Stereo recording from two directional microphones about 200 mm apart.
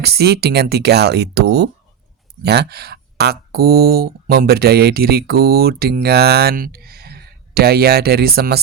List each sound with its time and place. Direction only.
0.0 s speech: 55° right (ahead or behind)